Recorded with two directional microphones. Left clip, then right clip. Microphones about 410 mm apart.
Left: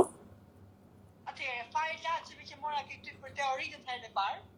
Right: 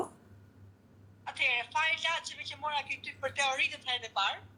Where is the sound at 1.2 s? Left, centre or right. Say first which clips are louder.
Right 8 dB; right.